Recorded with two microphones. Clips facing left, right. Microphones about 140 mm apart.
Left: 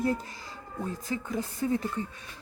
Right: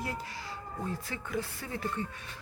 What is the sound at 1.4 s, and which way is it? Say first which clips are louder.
Speech: left 8 dB; 20° left (ahead or behind).